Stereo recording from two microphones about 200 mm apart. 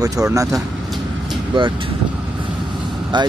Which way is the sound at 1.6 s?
25° right (ahead or behind).